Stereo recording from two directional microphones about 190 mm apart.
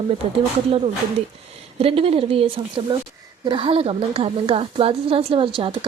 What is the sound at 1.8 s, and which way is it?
A woman's voice, 30° right (ahead or behind).